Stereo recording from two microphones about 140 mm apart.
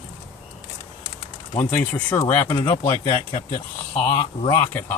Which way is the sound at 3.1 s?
40° left (ahead or behind).